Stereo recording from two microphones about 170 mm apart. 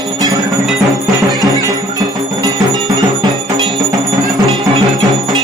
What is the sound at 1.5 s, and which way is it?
Music, 20° right (ahead or behind).